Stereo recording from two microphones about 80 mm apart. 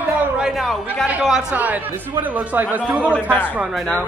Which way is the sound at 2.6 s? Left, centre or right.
Centre.